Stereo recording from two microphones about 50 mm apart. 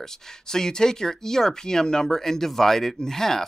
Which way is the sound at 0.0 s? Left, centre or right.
Centre.